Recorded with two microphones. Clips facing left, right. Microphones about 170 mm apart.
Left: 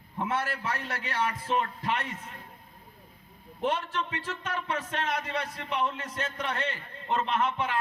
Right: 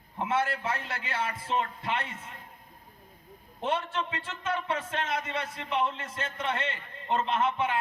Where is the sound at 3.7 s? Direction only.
25° right (ahead or behind).